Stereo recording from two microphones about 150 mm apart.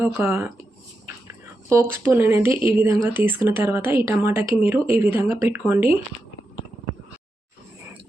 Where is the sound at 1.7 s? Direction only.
15° right (ahead or behind).